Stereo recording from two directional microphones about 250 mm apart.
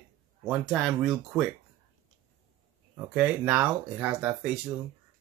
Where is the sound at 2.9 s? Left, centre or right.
Centre.